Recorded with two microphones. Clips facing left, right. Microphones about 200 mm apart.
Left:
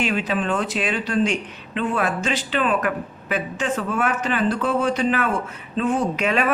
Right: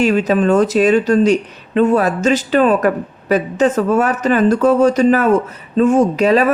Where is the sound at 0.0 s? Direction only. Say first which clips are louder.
Right 9 dB; 40° right (ahead or behind).